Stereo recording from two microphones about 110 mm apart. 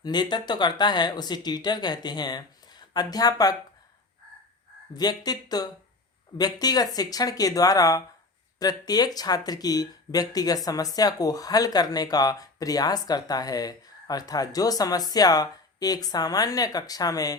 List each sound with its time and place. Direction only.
0.0 s speech: 40° left (ahead or behind)
4.9 s speech: 35° left (ahead or behind)